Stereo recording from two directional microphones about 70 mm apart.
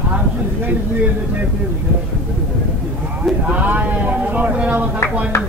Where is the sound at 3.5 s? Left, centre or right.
Right.